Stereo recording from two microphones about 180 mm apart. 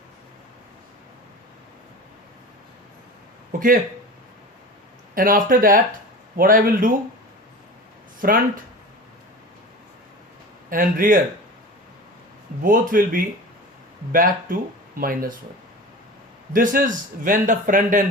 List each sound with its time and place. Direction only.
5.1 s a man's voice: 50° right (ahead or behind)
8.2 s a man's voice: 50° right (ahead or behind)
10.7 s a man's voice: 50° right (ahead or behind)
12.6 s a man's voice: 50° right (ahead or behind)
16.5 s a man's voice: 50° right (ahead or behind)